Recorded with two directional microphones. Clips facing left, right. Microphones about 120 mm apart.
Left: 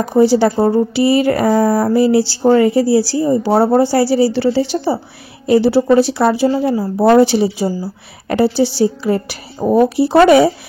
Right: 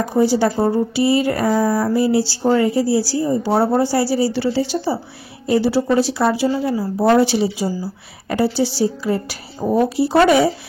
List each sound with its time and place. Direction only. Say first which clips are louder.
0.1 s speech: left 6 dB; 70° left (ahead or behind)